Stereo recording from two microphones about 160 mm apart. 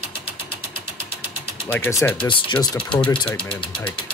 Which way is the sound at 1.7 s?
10° left (ahead or behind).